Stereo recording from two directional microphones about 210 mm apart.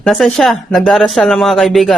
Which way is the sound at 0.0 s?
Centre (ahead or behind).